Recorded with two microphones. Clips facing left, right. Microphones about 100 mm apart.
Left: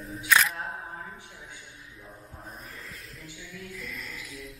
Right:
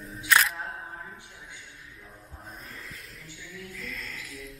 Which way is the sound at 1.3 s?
10° left (ahead or behind).